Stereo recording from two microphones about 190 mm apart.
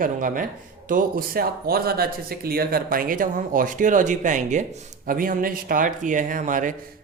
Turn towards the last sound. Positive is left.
turn(degrees=-45)  # may be behind; listen again after turning